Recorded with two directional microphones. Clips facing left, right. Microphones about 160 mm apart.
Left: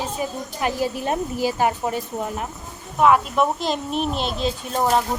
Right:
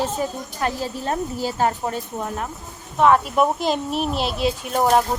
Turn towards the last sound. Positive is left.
turn(degrees=-5)  # may be behind; listen again after turning